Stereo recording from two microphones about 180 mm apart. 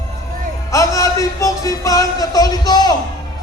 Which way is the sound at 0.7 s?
15° left (ahead or behind).